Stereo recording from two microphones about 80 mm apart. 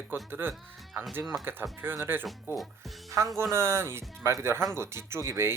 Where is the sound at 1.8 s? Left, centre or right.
Right.